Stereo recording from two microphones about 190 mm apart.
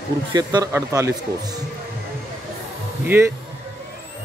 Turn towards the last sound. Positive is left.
turn(degrees=-10)  # may be behind; listen again after turning